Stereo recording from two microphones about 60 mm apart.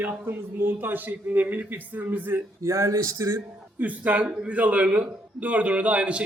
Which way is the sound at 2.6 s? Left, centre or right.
Right.